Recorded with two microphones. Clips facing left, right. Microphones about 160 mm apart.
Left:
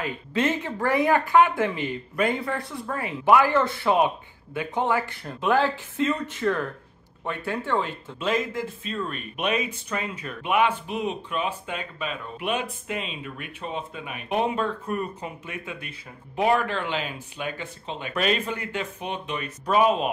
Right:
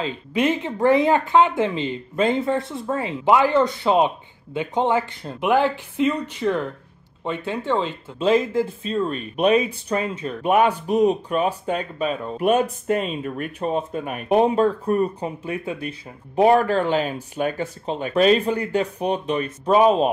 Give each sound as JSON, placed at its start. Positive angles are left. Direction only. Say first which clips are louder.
{"t": 0.0, "sound": "speech", "louder": "right 4 dB", "side_deg": -15}
{"t": 8.2, "sound": "speech", "louder": "right 8 dB", "side_deg": -30}
{"t": 10.4, "sound": "speech", "louder": "right 5 dB", "side_deg": -40}